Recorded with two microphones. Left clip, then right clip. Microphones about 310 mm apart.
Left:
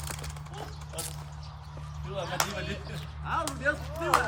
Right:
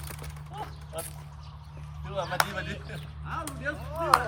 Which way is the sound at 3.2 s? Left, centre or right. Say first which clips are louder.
Left 5 dB; centre.